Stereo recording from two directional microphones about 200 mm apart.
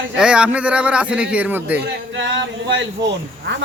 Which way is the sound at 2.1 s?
65° right (ahead or behind).